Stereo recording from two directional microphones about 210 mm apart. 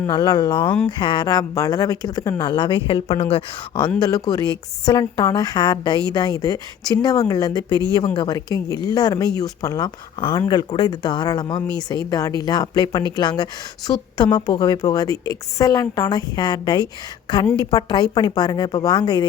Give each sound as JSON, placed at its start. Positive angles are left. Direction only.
{"t": 0.0, "sound": "a woman's voice", "side_deg": 20}